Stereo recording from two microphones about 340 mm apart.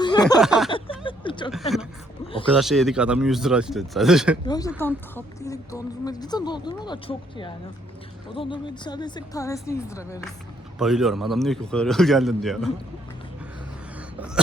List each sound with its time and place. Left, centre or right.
0.0 s a sound: centre
0.4 s a man's voice: centre
0.7 s a sound: centre
2.2 s speech: centre
2.6 s a man's voice: centre
4.4 s a man's voice: centre